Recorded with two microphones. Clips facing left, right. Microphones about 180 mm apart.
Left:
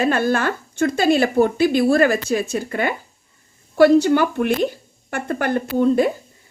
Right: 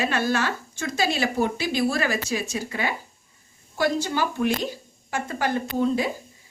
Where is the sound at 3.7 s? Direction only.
65° left (ahead or behind).